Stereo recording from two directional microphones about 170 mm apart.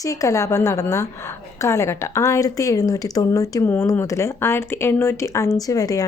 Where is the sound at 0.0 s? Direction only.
20° left (ahead or behind).